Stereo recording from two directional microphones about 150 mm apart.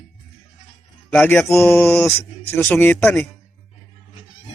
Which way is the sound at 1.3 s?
15° left (ahead or behind).